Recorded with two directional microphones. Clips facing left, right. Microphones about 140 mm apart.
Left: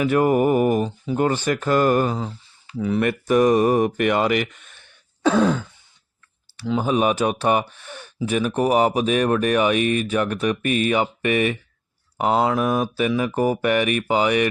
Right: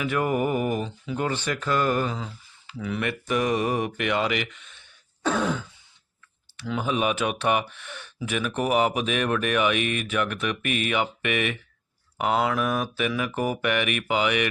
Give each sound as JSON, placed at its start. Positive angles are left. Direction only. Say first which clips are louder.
{"t": 0.0, "sound": "speech", "louder": "left 7 dB", "side_deg": 40}
{"t": 5.2, "sound": "throat clearing", "louder": "left 7 dB", "side_deg": 90}
{"t": 6.6, "sound": "speech", "louder": "left 6 dB", "side_deg": 35}